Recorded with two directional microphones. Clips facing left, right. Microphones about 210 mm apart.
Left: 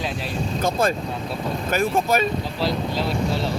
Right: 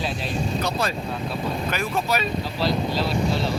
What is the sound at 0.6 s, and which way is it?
Speech, 50° left (ahead or behind).